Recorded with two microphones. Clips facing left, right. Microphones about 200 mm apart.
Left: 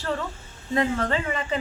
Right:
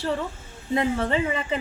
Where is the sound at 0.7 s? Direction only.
20° right (ahead or behind).